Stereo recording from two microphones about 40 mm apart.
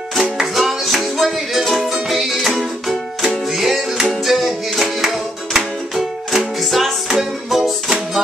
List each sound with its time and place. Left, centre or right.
0.4 s music: centre